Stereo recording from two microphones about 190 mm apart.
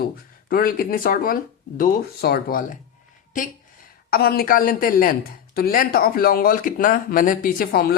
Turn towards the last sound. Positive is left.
turn(degrees=50)  # may be behind; listen again after turning